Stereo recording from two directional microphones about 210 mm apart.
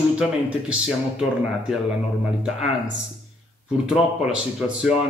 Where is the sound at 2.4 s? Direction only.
Centre (ahead or behind).